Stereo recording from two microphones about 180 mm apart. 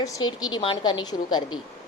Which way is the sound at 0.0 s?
20° left (ahead or behind).